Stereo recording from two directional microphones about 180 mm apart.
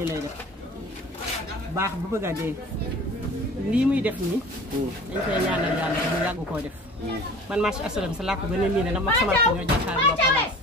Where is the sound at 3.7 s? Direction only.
10° right (ahead or behind).